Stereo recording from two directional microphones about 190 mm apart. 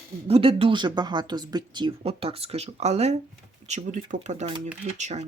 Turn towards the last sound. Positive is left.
turn(degrees=-40)  # may be behind; listen again after turning